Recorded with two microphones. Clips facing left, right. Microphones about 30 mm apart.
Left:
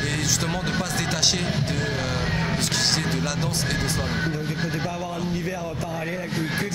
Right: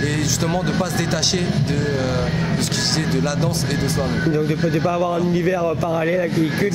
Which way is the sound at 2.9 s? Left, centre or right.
Centre.